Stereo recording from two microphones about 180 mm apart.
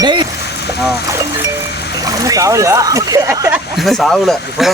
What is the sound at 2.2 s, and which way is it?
Speech, 20° right (ahead or behind).